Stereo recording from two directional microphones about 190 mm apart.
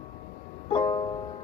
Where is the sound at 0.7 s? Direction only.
30° left (ahead or behind).